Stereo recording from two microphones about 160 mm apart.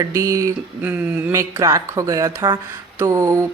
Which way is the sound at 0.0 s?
20° right (ahead or behind).